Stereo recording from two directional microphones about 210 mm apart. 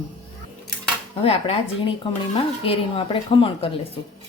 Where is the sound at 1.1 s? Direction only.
30° left (ahead or behind).